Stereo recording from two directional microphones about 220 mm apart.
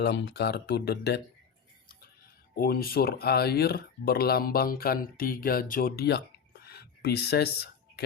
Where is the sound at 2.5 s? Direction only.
45° left (ahead or behind).